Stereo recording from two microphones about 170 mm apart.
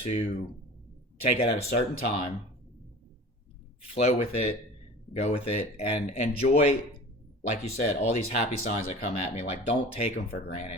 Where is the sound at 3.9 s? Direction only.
35° left (ahead or behind).